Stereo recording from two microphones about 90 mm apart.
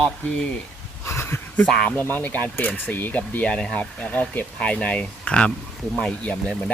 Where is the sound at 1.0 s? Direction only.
25° left (ahead or behind).